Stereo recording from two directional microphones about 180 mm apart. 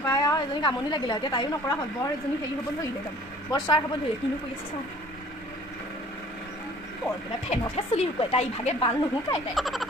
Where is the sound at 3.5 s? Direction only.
20° left (ahead or behind).